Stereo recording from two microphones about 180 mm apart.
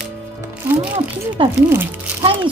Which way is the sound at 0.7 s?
10° right (ahead or behind).